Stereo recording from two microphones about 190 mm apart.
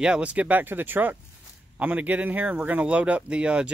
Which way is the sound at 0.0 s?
5° right (ahead or behind).